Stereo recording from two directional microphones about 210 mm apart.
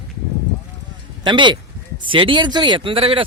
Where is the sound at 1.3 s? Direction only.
20° right (ahead or behind).